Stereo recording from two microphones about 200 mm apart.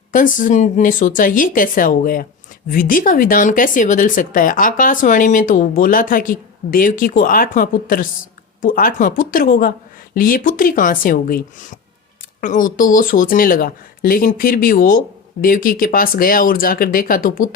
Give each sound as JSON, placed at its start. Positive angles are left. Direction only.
{"t": 0.1, "sound": "speech", "side_deg": 40}